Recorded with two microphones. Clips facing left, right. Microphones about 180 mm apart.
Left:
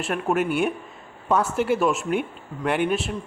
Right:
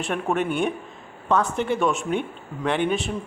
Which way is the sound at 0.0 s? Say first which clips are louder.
Left 1 dB; 5° left (ahead or behind).